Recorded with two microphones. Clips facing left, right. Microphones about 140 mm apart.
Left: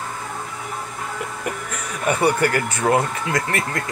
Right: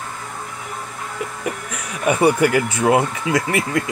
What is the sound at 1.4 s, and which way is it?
Speech, centre (ahead or behind).